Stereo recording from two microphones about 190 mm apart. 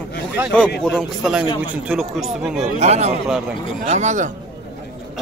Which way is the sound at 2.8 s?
35° right (ahead or behind).